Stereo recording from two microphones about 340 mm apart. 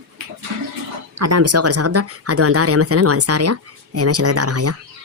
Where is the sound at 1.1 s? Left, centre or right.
Right.